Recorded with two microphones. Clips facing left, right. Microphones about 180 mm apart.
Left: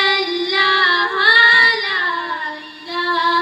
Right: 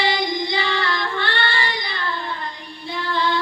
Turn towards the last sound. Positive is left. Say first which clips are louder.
# left 3 dB
turn(degrees=70)  # may be behind; listen again after turning